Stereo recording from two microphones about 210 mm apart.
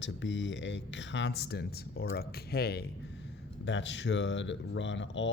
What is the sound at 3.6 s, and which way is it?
Speech, 60° left (ahead or behind).